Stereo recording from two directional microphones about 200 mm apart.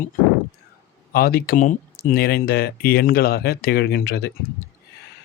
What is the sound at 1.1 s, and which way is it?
Speech, 50° left (ahead or behind).